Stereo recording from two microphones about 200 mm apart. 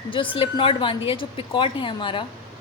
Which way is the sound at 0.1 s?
25° left (ahead or behind).